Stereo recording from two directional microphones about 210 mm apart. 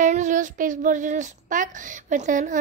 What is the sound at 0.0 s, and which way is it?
Female singing, 35° right (ahead or behind).